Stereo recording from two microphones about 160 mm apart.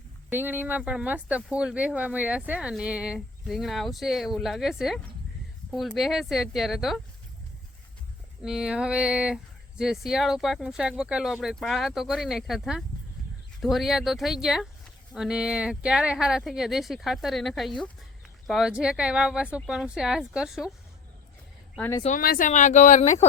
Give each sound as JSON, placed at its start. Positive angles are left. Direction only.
{"t": 0.3, "sound": "speech", "side_deg": -10}
{"t": 8.4, "sound": "speech", "side_deg": -5}
{"t": 21.8, "sound": "speech", "side_deg": 15}
{"t": 22.2, "sound": "speech", "side_deg": 65}